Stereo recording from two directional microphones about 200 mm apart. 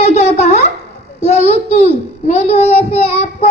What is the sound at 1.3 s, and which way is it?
A child's voice, 30° left (ahead or behind).